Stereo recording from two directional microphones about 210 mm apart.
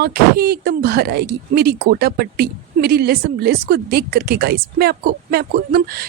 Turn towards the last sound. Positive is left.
turn(degrees=-45)  # may be behind; listen again after turning